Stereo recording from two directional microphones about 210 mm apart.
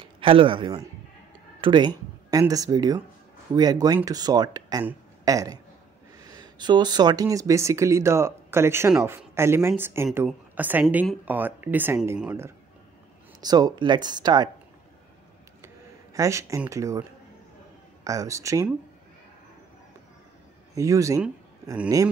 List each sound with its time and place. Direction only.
0.0 s speech: 25° right (ahead or behind)
15.6 s a sound: 15° right (ahead or behind)
18.0 s speech: 15° right (ahead or behind)
20.7 s speech: 15° right (ahead or behind)